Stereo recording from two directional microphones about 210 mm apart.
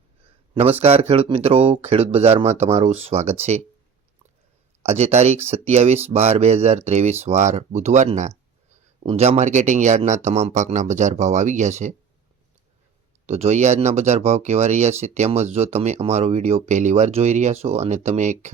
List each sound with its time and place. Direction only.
0.5 s speech: 30° right (ahead or behind)
4.8 s speech: 30° right (ahead or behind)
13.2 s speech: 30° right (ahead or behind)